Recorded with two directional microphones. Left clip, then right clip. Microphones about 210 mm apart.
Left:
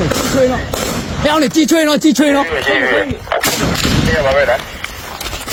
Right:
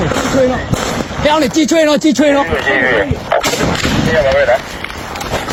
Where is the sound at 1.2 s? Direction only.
50° left (ahead or behind).